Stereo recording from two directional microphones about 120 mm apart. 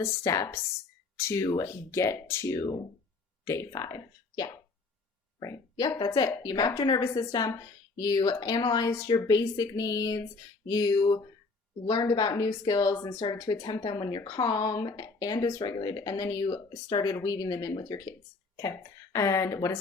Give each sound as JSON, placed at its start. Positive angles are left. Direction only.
{"t": 0.0, "sound": "speech", "side_deg": 25}
{"t": 18.5, "sound": "speech", "side_deg": 20}